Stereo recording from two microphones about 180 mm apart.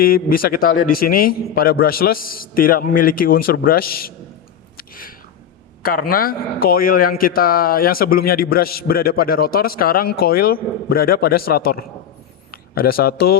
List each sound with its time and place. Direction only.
0.0 s a man's voice: 55° left (ahead or behind)
4.8 s a sound: 50° left (ahead or behind)
5.8 s a man's voice: 55° left (ahead or behind)